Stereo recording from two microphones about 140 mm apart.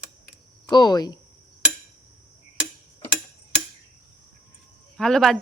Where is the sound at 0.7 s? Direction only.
30° left (ahead or behind).